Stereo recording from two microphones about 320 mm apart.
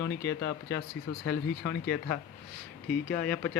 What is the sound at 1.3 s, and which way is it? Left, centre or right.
Speech, centre.